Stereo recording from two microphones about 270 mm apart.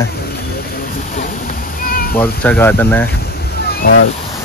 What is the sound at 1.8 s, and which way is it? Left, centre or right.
Cat, left.